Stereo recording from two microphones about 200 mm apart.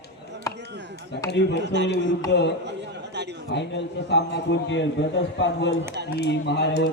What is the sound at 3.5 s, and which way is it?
A man's voice, 60° left (ahead or behind).